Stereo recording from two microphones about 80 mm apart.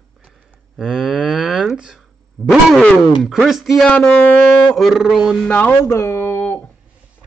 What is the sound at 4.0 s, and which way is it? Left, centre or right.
Speech, centre.